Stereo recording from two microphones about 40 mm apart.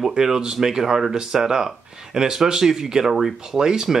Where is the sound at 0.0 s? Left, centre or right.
Centre.